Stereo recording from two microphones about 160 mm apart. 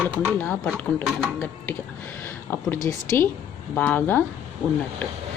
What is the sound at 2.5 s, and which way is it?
Speech, 15° left (ahead or behind).